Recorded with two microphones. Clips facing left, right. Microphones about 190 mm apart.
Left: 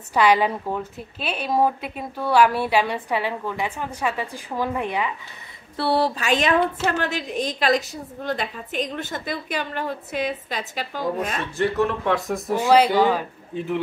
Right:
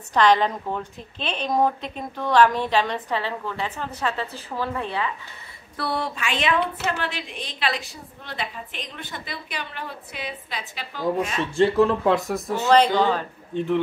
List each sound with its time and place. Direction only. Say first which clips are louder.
0.1 s a woman's voice: even; 10° left (ahead or behind)
5.8 s a woman's voice: left 6 dB; 30° left (ahead or behind)
11.5 s speech: right 4 dB; 25° right (ahead or behind)
12.4 s a woman's voice: left 1 dB; 10° left (ahead or behind)